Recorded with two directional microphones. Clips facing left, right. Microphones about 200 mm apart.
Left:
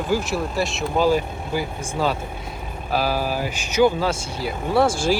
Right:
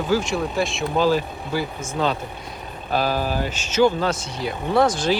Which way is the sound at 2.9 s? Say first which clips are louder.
Even; 5° left (ahead or behind).